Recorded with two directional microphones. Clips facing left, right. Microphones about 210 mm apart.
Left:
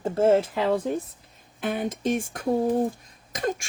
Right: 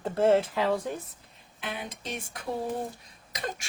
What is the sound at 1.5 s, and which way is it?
Speech, 50° left (ahead or behind).